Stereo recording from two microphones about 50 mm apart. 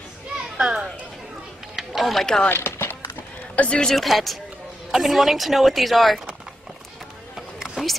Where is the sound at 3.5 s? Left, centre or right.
Left.